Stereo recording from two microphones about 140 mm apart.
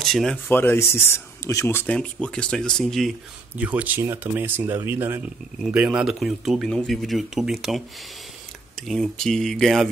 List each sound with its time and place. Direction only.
0.0 s speech: 5° left (ahead or behind)
0.5 s speech: 15° left (ahead or behind)
3.5 s speech: 10° right (ahead or behind)
8.8 s speech: centre (ahead or behind)